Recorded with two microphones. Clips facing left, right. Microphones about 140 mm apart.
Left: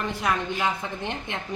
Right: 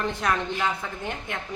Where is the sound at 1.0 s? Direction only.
25° left (ahead or behind).